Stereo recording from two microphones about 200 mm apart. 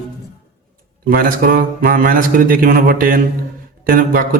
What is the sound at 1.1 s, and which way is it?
A man's voice, 45° right (ahead or behind).